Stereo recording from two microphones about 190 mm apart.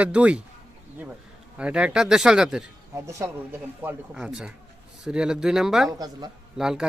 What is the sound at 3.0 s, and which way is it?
Speech, 15° right (ahead or behind).